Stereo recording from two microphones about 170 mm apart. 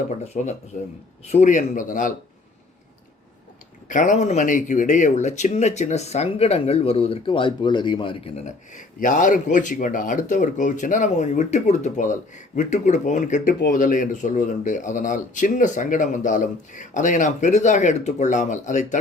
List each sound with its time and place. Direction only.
0.1 s speech: 40° left (ahead or behind)
3.8 s speech: 50° left (ahead or behind)
13.4 s speech: 65° left (ahead or behind); by 18.9 s 45° left (ahead or behind)